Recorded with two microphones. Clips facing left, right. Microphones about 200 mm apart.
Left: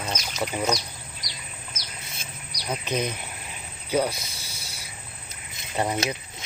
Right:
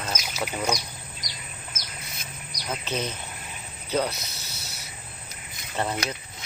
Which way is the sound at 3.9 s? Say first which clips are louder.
Left 2 dB; 10° left (ahead or behind).